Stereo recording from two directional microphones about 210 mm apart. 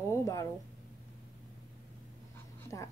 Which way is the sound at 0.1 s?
15° left (ahead or behind).